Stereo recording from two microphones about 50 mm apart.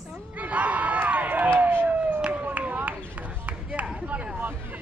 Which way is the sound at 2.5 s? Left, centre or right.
Right.